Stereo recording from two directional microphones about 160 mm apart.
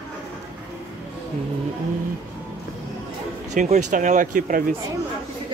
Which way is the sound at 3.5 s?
50° right (ahead or behind).